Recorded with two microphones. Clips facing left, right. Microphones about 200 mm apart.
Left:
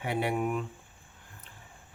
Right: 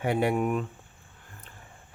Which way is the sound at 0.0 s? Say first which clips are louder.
Right 4 dB; 45° right (ahead or behind).